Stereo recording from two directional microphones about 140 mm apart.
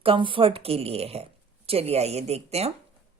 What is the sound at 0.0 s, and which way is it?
Speech, 40° right (ahead or behind).